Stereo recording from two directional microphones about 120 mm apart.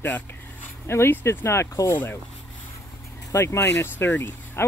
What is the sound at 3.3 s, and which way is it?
Speech, 25° left (ahead or behind).